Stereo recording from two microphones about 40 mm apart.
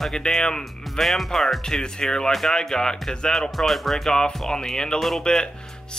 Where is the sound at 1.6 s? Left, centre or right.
Centre.